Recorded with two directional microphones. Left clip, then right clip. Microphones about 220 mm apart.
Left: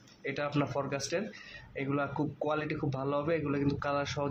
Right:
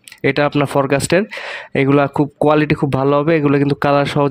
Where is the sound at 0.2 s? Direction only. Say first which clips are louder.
Right 18 dB; 45° right (ahead or behind).